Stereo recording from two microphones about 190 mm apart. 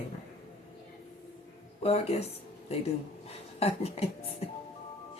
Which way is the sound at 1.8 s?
30° left (ahead or behind).